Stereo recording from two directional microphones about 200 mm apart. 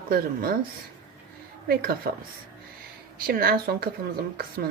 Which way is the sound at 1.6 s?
50° right (ahead or behind).